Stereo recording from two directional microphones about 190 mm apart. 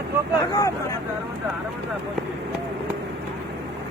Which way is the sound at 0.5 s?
15° left (ahead or behind).